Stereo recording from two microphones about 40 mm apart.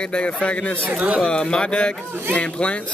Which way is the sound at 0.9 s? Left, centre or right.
Right.